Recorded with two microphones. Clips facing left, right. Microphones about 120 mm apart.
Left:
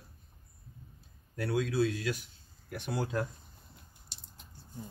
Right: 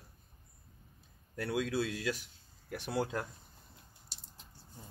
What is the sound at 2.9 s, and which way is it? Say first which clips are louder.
Speech: even; 25° right (ahead or behind).